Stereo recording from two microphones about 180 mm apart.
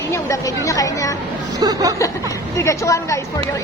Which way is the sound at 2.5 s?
15° left (ahead or behind).